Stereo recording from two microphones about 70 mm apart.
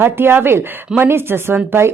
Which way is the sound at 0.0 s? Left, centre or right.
Right.